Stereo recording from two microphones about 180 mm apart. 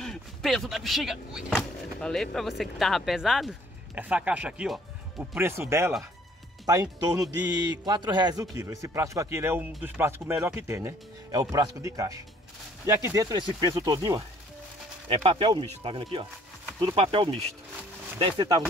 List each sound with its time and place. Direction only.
0.0 s speech: centre (ahead or behind); by 14.2 s 20° right (ahead or behind)
15.0 s speech: 30° right (ahead or behind)